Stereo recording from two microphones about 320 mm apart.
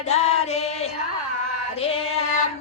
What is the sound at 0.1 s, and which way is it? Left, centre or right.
Female singing, centre.